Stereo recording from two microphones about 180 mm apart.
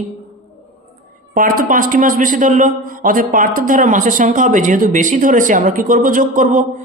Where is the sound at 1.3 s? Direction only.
50° right (ahead or behind).